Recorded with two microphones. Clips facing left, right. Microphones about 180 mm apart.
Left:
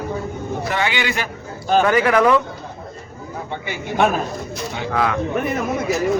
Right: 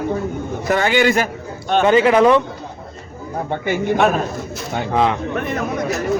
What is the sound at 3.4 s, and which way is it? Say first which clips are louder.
Speech: right 9 dB; 50° right (ahead or behind).